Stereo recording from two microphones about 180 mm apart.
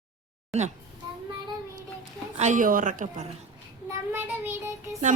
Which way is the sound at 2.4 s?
45° right (ahead or behind).